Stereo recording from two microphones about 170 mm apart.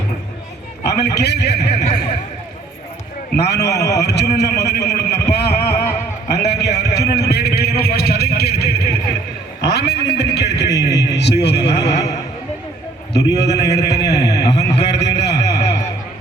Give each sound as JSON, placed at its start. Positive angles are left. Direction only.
{"t": 0.9, "sound": "a man's voice", "side_deg": 75}
{"t": 3.4, "sound": "a man's voice", "side_deg": 75}
{"t": 5.3, "sound": "a sound", "side_deg": 75}
{"t": 13.1, "sound": "a man's voice", "side_deg": 80}
{"t": 13.8, "sound": "a man's voice", "side_deg": 20}
{"t": 14.8, "sound": "a sound", "side_deg": 85}